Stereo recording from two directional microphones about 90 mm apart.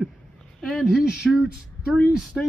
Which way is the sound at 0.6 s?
Centre (ahead or behind).